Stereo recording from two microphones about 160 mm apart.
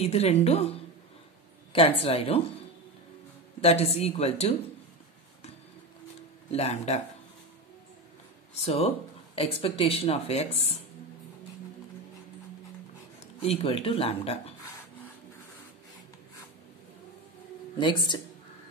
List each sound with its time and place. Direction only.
0.0 s speech: 40° left (ahead or behind)
3.6 s speech: 40° left (ahead or behind)
6.5 s speech: 40° left (ahead or behind)
8.5 s speech: 40° left (ahead or behind)
13.4 s speech: 40° left (ahead or behind)
17.7 s speech: 30° left (ahead or behind)